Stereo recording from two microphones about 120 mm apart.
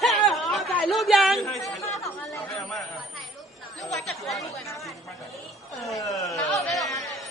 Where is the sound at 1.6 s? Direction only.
25° left (ahead or behind).